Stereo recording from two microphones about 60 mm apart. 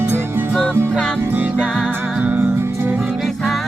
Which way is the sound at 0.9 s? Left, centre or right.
Centre.